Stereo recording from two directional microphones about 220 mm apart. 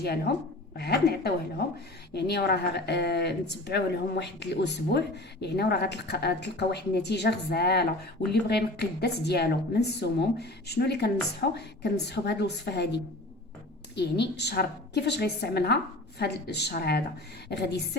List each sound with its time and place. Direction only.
0.0 s a woman's voice: 45° left (ahead or behind)